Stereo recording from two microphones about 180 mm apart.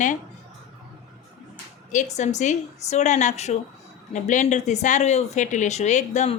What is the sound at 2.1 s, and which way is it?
Speech, 40° left (ahead or behind).